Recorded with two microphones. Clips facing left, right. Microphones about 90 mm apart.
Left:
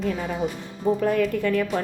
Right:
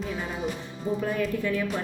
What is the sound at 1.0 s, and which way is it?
Speech, 90° left.